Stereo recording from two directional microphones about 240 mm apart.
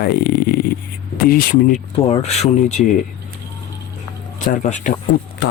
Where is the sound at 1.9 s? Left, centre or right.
Left.